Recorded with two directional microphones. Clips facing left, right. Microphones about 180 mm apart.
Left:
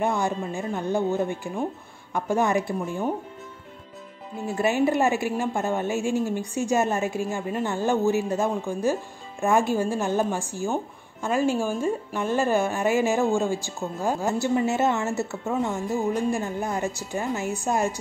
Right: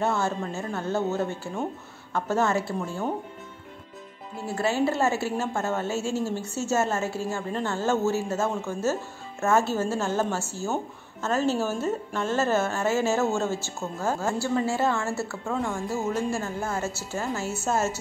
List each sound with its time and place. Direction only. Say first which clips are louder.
0.0 s a woman's voice: left 1 dB; 15° left (ahead or behind)
4.5 s a woman's voice: left 3 dB; 15° left (ahead or behind)